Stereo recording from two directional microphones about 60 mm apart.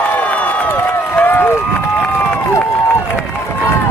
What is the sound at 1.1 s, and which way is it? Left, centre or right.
Run, left.